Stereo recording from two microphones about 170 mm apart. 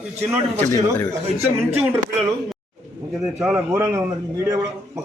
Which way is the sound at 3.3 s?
15° right (ahead or behind).